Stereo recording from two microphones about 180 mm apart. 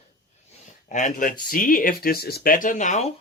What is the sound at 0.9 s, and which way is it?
Speech, 45° left (ahead or behind).